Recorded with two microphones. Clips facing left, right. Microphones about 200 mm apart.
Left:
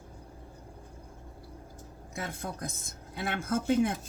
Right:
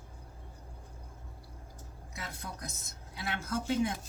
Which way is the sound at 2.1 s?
50° left (ahead or behind).